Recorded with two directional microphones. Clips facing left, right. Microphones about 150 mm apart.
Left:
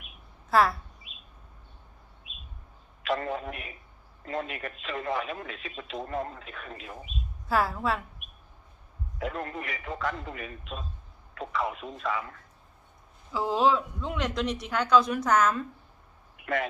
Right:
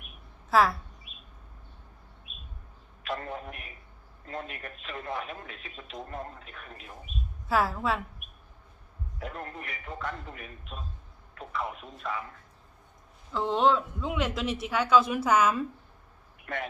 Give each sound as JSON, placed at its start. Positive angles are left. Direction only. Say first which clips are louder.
{"t": 0.5, "sound": "speech", "louder": "even", "side_deg": 0}
{"t": 2.3, "sound": "bird", "louder": "left 1 dB", "side_deg": 90}
{"t": 3.0, "sound": "a man's voice", "louder": "left 5 dB", "side_deg": 90}
{"t": 7.4, "sound": "speech", "louder": "even", "side_deg": 0}
{"t": 9.1, "sound": "speech", "louder": "left 5 dB", "side_deg": 90}
{"t": 13.3, "sound": "speech", "louder": "even", "side_deg": 5}
{"t": 16.4, "sound": "speech", "louder": "left 6 dB", "side_deg": 90}